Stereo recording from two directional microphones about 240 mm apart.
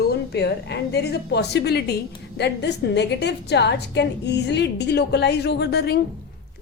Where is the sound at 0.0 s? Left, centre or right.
Left.